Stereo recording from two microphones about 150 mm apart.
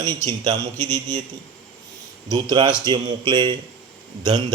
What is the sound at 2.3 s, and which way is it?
A man's voice, 30° right (ahead or behind).